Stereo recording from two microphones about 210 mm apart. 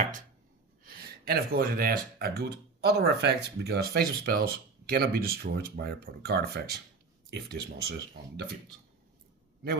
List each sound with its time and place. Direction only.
0.9 s speech: 45° right (ahead or behind)